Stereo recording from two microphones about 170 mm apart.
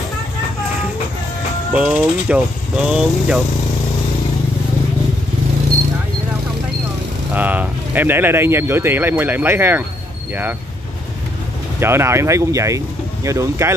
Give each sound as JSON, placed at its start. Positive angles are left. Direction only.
{"t": 1.7, "sound": "speech", "side_deg": -5}
{"t": 7.3, "sound": "speech", "side_deg": -10}
{"t": 11.8, "sound": "speech", "side_deg": -15}